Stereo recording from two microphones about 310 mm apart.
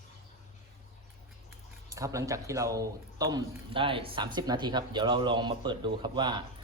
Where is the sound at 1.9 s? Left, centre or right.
Centre.